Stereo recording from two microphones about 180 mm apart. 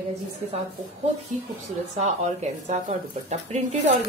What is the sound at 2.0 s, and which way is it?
A woman's voice, 35° right (ahead or behind).